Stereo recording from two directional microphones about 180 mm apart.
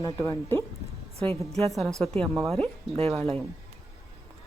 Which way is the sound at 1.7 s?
Centre (ahead or behind).